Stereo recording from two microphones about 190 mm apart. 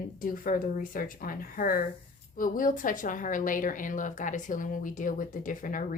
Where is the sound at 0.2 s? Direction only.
45° left (ahead or behind).